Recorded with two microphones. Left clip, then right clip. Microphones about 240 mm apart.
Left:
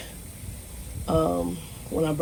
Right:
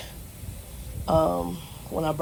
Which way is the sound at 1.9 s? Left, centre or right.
Right.